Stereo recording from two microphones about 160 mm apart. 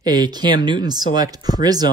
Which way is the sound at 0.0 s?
25° right (ahead or behind).